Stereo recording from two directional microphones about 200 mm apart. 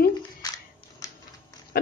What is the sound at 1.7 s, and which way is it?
Pig, 50° left (ahead or behind).